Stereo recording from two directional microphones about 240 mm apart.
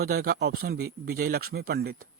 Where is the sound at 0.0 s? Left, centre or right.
Right.